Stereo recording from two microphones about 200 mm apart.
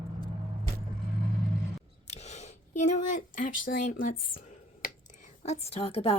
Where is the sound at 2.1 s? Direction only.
35° left (ahead or behind).